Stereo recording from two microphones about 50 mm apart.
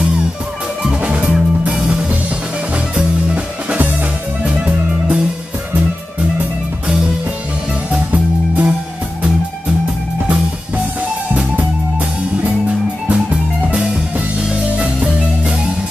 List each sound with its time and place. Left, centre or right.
1.0 s music: centre
4.5 s music: right
8.1 s music: right
11.5 s music: right